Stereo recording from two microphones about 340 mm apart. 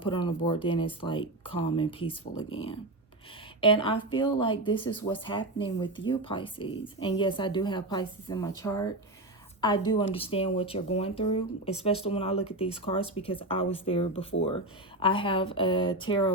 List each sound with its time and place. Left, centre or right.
0.0 s a woman's voice: centre